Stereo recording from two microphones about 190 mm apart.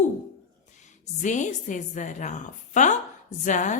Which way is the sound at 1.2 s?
40° left (ahead or behind).